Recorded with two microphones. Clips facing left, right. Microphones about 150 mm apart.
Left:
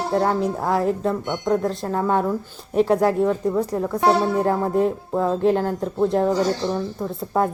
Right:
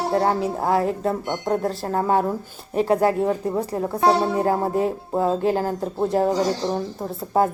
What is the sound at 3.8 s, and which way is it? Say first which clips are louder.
Speech: right 2 dB; 30° right (ahead or behind).